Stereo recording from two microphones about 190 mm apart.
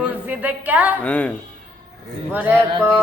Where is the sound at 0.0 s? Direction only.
10° right (ahead or behind).